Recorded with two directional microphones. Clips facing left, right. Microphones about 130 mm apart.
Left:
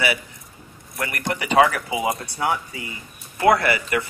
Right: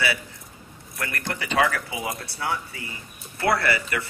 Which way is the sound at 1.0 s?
15° left (ahead or behind).